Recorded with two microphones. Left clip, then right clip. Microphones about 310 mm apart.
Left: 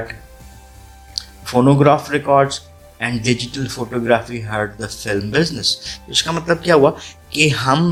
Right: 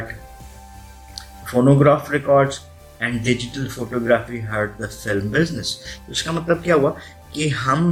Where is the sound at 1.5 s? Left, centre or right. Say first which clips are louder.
Left 2 dB; left.